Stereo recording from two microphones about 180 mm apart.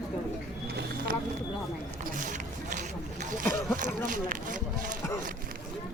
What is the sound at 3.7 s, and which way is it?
Speech, 45° right (ahead or behind).